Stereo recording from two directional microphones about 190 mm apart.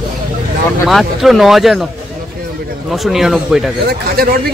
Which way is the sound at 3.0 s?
Centre (ahead or behind).